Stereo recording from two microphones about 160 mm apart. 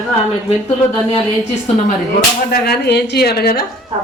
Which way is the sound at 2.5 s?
90° left.